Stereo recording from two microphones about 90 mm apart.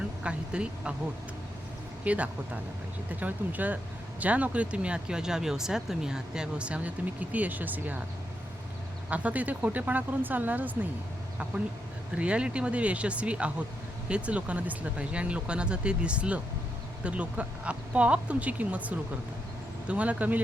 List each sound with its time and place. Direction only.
0.2 s speech: 10° right (ahead or behind)
2.0 s speech: 15° right (ahead or behind)
9.0 s speech: 15° right (ahead or behind)
12.1 s speech: 15° right (ahead or behind)